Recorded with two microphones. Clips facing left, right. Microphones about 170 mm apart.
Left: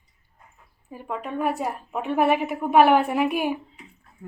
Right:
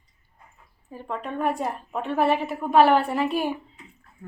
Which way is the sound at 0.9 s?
10° left (ahead or behind).